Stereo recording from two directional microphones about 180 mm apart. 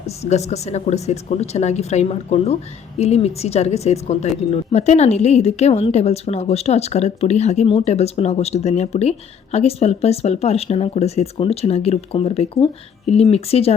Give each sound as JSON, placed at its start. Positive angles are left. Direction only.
{"t": 0.2, "sound": "speech", "side_deg": 40}